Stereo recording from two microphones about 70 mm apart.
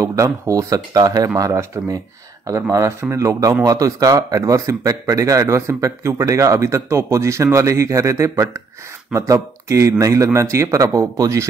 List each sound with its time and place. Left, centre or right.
0.0 s speech: right
1.4 s speech: right